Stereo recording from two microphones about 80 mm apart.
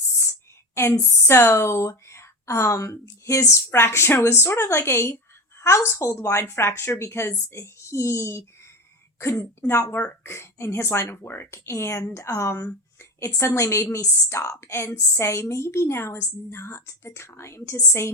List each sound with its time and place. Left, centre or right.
0.8 s a woman's voice: left
9.6 s a woman's voice: left